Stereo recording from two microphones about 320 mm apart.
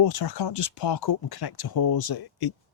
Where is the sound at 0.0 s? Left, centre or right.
Left.